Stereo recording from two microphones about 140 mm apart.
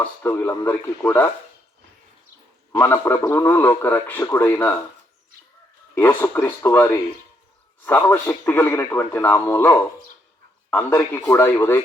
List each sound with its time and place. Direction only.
0.0 s a man's voice: 15° left (ahead or behind)
2.7 s a man's voice: 20° left (ahead or behind)
5.9 s a man's voice: 15° left (ahead or behind)